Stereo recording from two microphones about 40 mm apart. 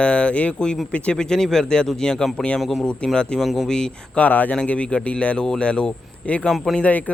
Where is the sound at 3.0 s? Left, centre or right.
Left.